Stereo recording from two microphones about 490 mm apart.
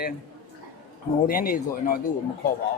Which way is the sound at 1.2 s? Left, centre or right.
Centre.